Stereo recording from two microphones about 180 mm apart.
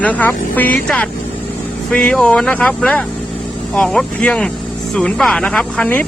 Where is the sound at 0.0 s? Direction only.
10° left (ahead or behind).